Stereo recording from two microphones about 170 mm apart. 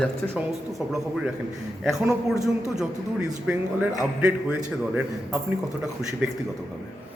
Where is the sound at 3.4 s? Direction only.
5° right (ahead or behind).